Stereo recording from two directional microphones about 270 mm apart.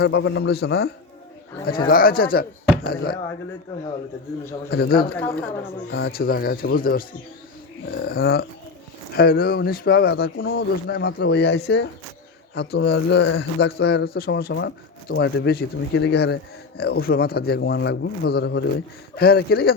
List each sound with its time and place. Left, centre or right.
0.0 s a man's voice: left
1.9 s a man's voice: left
4.7 s a man's voice: left
5.0 s speech: centre
5.9 s a man's voice: left